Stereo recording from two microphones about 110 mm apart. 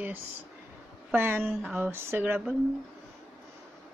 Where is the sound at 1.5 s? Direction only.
5° right (ahead or behind).